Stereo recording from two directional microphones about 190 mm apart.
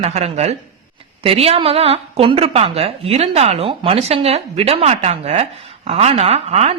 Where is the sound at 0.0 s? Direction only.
35° right (ahead or behind).